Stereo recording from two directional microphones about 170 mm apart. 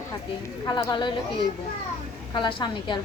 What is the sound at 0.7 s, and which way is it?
Speech, 25° left (ahead or behind).